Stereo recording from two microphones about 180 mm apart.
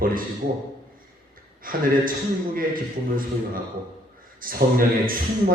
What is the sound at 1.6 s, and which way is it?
Speech, 50° right (ahead or behind).